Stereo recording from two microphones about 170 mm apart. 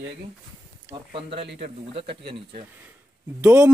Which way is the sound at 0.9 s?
30° right (ahead or behind).